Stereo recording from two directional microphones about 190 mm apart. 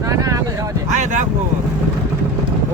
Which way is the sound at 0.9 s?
40° right (ahead or behind).